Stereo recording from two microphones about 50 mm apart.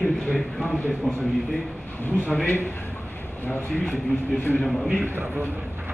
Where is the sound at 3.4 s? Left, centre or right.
Left.